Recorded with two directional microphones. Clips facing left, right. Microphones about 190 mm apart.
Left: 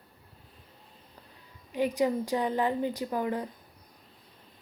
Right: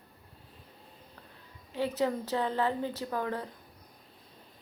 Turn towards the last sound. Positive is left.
turn(degrees=15)  # may be behind; listen again after turning